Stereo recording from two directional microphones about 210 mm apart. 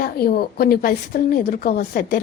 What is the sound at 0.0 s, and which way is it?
A woman's voice, 45° left (ahead or behind).